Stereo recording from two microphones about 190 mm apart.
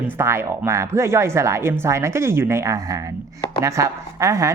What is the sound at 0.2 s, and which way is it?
A woman's voice, 15° right (ahead or behind).